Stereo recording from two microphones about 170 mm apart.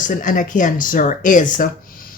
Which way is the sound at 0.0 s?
50° left (ahead or behind).